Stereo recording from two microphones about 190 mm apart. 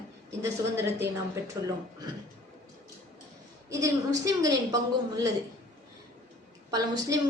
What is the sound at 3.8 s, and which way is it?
Speech, 20° right (ahead or behind).